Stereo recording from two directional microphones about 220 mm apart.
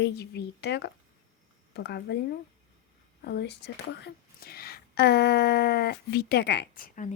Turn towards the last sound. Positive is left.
turn(degrees=40)  # may be behind; listen again after turning